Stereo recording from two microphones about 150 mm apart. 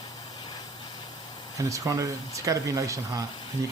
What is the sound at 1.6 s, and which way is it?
Speech, 20° right (ahead or behind).